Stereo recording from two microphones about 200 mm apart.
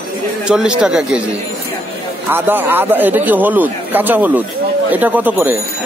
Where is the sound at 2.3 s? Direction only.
10° right (ahead or behind).